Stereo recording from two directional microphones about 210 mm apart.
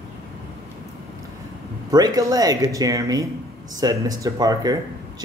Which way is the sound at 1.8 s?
20° right (ahead or behind).